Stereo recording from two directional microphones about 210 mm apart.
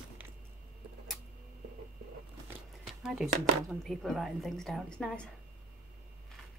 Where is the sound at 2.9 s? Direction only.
Centre (ahead or behind).